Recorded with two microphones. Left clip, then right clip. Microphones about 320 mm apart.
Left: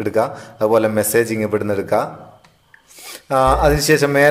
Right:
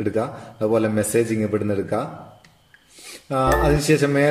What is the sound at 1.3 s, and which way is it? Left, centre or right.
Speech, left.